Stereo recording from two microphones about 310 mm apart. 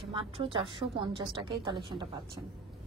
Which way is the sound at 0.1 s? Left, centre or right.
Centre.